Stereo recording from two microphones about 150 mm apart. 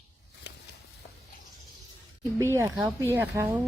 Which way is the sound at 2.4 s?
20° right (ahead or behind).